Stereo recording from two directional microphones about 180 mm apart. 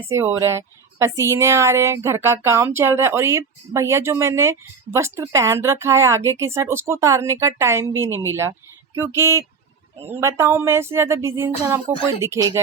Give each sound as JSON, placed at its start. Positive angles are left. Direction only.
{"t": 0.1, "sound": "speech", "side_deg": -15}